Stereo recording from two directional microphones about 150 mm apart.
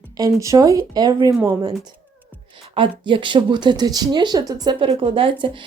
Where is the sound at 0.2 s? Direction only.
20° right (ahead or behind).